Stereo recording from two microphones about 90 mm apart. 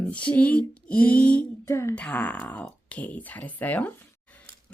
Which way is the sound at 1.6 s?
30° left (ahead or behind).